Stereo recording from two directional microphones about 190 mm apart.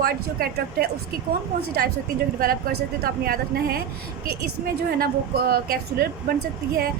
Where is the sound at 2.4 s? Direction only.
50° right (ahead or behind).